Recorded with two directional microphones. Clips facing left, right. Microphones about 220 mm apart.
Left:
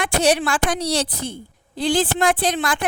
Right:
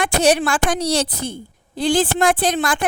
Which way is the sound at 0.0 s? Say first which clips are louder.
Right 2 dB; 45° right (ahead or behind).